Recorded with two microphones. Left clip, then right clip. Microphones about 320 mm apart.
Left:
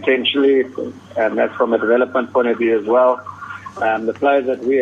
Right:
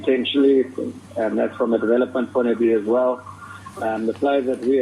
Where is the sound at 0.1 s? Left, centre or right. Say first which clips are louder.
Left 3 dB; left.